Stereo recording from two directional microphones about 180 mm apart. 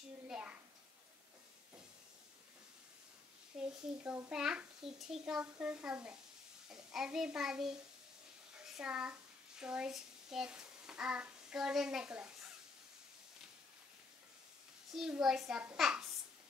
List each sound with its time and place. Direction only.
0.3 s a sound: 5° right (ahead or behind)
3.5 s a child's voice: 5° right (ahead or behind)
8.7 s a child's voice: 5° right (ahead or behind)
15.0 s a child's voice: centre (ahead or behind)